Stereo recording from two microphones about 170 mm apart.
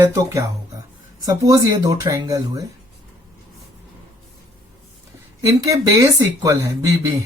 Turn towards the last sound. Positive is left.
turn(degrees=-20)  # may be behind; listen again after turning